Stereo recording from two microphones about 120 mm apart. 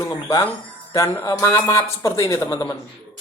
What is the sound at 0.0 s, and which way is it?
Speech, 30° left (ahead or behind).